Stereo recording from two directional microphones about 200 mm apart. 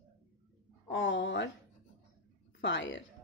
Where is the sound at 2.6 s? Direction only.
65° left (ahead or behind).